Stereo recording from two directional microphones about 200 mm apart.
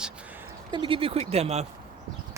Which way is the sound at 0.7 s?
25° right (ahead or behind).